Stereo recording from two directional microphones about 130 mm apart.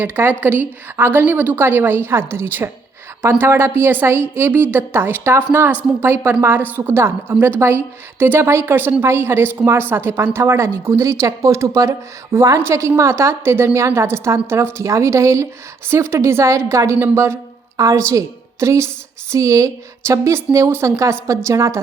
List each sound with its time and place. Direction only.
0.0 s a woman's voice: 15° right (ahead or behind)